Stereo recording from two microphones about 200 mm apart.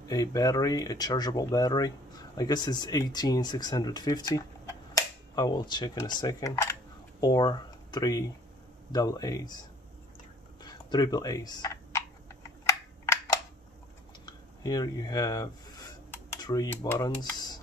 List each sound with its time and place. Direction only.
0.1 s speech: 20° left (ahead or behind)
10.6 s computer keyboard: 20° left (ahead or behind)
12.4 s a sound: 15° left (ahead or behind)
16.3 s speech: 20° left (ahead or behind)